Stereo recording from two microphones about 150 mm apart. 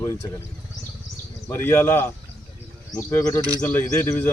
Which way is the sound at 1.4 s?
15° left (ahead or behind).